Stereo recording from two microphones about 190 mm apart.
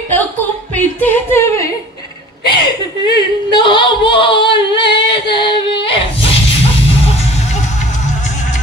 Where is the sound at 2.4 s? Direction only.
25° left (ahead or behind).